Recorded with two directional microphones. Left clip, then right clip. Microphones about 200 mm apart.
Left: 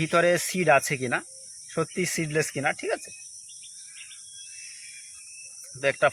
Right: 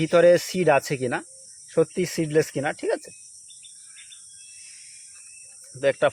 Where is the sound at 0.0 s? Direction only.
40° right (ahead or behind).